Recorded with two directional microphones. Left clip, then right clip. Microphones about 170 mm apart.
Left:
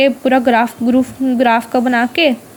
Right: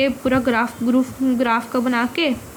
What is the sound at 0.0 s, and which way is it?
A woman's voice, 25° left (ahead or behind).